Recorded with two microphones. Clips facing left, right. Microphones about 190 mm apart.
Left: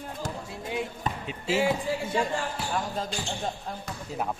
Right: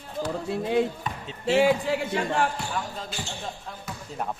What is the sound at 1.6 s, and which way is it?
Speech, 65° right (ahead or behind).